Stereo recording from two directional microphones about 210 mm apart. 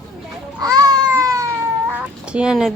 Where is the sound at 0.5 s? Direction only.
20° right (ahead or behind).